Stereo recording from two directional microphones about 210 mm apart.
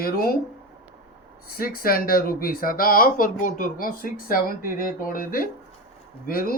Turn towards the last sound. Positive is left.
turn(degrees=45)  # may be behind; listen again after turning